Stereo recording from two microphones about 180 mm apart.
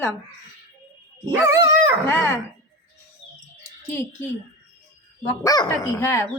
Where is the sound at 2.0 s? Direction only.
10° left (ahead or behind).